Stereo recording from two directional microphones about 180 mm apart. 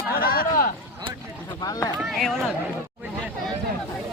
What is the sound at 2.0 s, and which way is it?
Speech, centre (ahead or behind).